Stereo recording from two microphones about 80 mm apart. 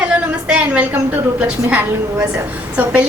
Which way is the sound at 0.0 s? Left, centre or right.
Centre.